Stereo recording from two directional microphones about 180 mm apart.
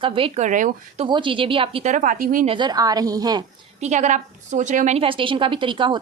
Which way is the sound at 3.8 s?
40° right (ahead or behind).